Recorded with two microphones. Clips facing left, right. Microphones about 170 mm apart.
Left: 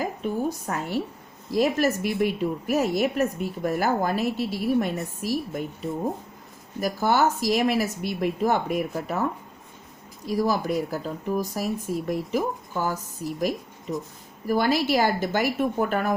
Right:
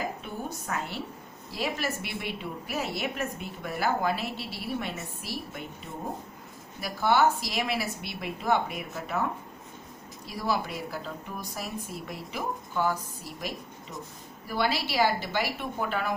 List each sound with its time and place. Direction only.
0.7 s a woman's voice: 45° left (ahead or behind)
6.7 s a woman's voice: 45° left (ahead or behind)
10.2 s a woman's voice: 45° left (ahead or behind)